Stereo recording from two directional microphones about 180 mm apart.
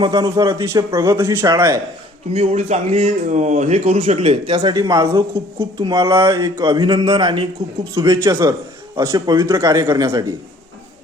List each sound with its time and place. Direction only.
0.0 s a man's voice: 20° right (ahead or behind)
2.3 s speech: 35° right (ahead or behind); by 10.3 s 20° right (ahead or behind)